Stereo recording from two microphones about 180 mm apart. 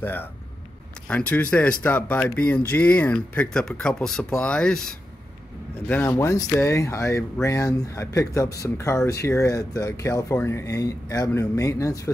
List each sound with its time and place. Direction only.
0.0 s speech: 10° left (ahead or behind)